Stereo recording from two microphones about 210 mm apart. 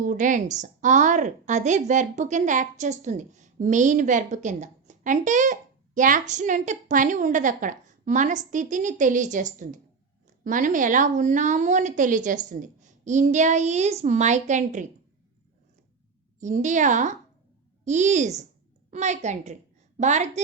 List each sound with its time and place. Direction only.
0.0 s a woman's voice: 35° right (ahead or behind)
16.4 s a woman's voice: 35° right (ahead or behind)